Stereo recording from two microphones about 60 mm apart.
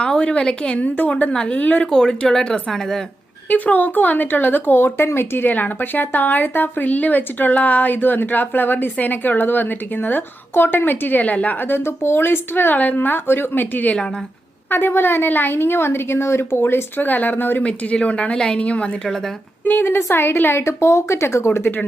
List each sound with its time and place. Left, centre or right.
0.0 s a woman's voice: centre
1.9 s speech: centre
3.5 s a woman's voice: left
5.5 s a woman's voice: left
11.9 s a woman's voice: left
17.6 s a woman's voice: centre
19.6 s a woman's voice: left